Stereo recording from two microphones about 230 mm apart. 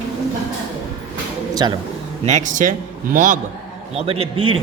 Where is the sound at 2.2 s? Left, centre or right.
Right.